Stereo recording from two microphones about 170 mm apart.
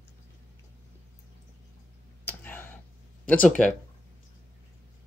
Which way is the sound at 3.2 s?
10° left (ahead or behind).